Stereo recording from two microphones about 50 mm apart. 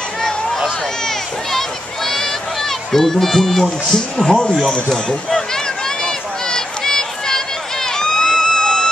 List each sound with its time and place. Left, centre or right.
2.9 s speech: centre
4.2 s speech: centre
6.0 s run: centre